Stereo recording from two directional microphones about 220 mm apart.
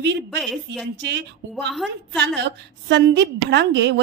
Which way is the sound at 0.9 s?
50° right (ahead or behind).